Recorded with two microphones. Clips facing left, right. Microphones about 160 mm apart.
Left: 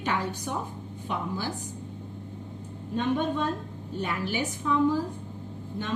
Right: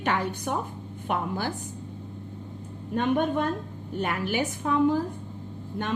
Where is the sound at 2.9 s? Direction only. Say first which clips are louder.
Right 2 dB; 55° right (ahead or behind).